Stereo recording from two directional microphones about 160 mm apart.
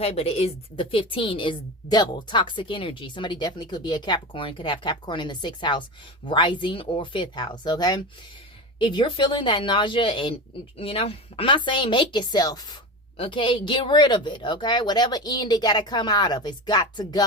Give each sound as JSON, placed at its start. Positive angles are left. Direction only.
{"t": 0.0, "sound": "a woman's voice", "side_deg": 40}